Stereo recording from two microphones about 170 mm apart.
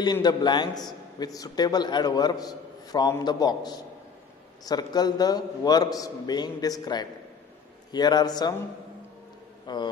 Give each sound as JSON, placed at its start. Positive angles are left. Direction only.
{"t": 0.0, "sound": "a man's voice", "side_deg": 25}
{"t": 9.7, "sound": "a man's voice", "side_deg": 25}